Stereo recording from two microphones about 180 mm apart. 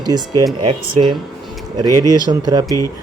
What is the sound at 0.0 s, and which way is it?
Speech, 20° right (ahead or behind).